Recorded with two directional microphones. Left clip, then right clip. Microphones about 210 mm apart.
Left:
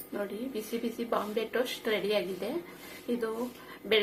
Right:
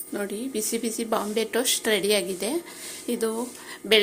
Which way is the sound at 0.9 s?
45° right (ahead or behind).